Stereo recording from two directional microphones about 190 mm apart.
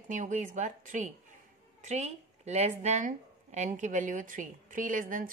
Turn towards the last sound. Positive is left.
turn(degrees=-45)  # may be behind; listen again after turning